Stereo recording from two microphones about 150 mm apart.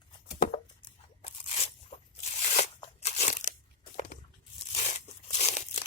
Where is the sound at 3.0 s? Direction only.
45° left (ahead or behind).